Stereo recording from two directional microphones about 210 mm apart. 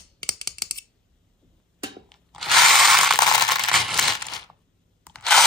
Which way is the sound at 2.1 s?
Centre (ahead or behind).